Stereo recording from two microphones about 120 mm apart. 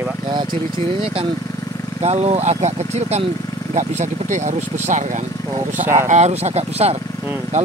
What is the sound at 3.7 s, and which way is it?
Speech, 80° right.